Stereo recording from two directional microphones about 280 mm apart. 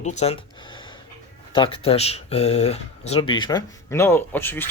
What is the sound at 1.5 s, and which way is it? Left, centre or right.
Speech, centre.